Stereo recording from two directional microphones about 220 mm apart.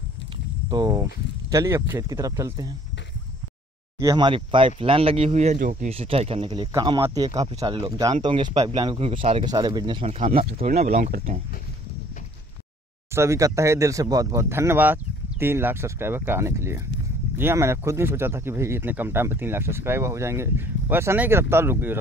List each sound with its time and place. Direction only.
0.7 s speech: 15° right (ahead or behind)
4.0 s speech: 20° right (ahead or behind); by 11.3 s 35° right (ahead or behind)
13.1 s speech: 15° right (ahead or behind)